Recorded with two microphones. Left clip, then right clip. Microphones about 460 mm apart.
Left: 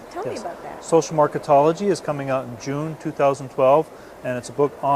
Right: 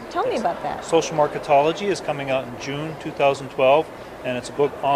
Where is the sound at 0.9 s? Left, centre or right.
Left.